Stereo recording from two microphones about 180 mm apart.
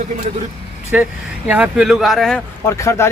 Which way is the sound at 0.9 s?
5° right (ahead or behind).